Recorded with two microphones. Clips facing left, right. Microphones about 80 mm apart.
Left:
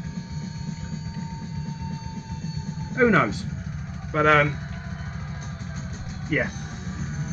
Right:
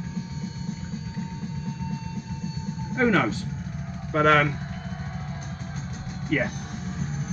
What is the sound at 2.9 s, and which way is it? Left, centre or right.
Speech, centre.